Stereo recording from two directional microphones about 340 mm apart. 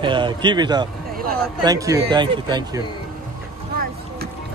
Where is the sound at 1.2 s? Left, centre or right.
Right.